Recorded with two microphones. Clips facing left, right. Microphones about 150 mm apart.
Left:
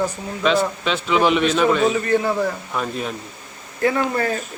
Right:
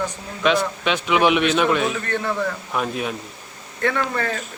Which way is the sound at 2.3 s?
25° left (ahead or behind).